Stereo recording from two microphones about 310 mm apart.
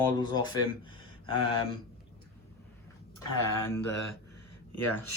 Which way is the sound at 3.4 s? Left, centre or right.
Left.